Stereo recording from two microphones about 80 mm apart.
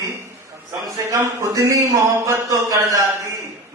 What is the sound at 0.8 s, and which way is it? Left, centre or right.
Speech, right.